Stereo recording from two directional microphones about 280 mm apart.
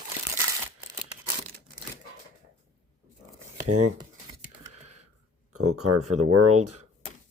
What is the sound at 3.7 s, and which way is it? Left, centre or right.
Speech, right.